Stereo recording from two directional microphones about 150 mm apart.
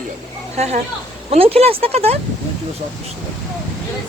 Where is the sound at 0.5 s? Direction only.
45° right (ahead or behind).